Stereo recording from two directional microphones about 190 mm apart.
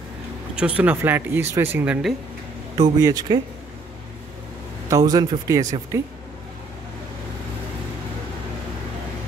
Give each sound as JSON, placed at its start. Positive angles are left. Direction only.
{"t": 0.6, "sound": "speech", "side_deg": -5}
{"t": 2.8, "sound": "speech", "side_deg": -20}
{"t": 4.8, "sound": "speech", "side_deg": -20}